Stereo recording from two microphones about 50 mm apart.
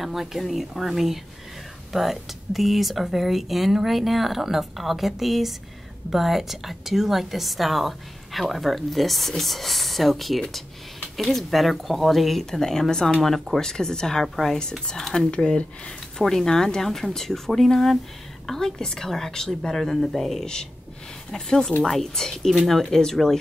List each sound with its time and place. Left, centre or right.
0.0 s speech: centre
15.3 s speech: centre